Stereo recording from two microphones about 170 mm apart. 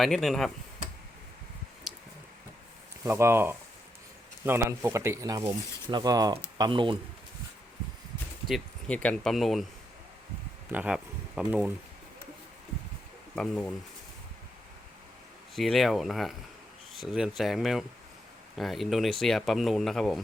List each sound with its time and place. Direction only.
0.0 s speech: centre (ahead or behind)
1.9 s a sound: 5° right (ahead or behind)
3.0 s speech: 15° right (ahead or behind)
8.4 s speech: 5° left (ahead or behind)
10.7 s speech: 10° right (ahead or behind)
13.3 s speech: 5° left (ahead or behind)
15.5 s speech: centre (ahead or behind)